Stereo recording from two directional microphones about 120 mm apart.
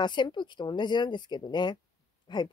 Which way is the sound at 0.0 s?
40° left (ahead or behind).